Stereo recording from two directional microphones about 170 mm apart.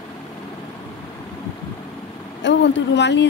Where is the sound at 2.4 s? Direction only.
90° left.